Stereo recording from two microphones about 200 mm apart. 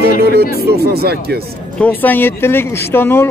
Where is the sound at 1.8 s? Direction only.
10° left (ahead or behind).